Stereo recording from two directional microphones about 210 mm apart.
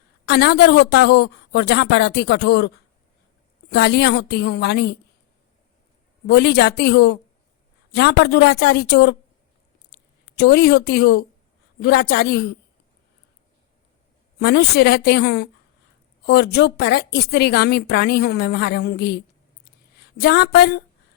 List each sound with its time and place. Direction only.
0.3 s speech: 50° left (ahead or behind)
6.2 s speech: 50° left (ahead or behind)
14.3 s speech: 50° left (ahead or behind)